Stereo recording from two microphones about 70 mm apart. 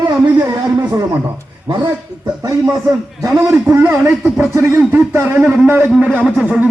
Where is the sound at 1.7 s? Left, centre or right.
Right.